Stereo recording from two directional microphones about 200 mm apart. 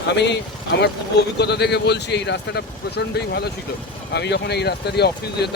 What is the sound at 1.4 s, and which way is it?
A man's voice, 55° left (ahead or behind).